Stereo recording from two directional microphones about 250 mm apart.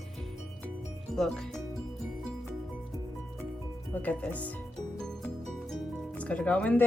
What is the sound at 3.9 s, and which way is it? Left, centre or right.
Speech, centre.